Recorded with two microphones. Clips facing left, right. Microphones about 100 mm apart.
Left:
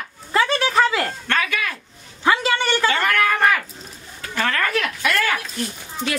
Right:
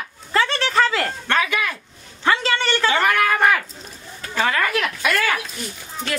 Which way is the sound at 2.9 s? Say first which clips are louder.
Right 3 dB; 15° right (ahead or behind).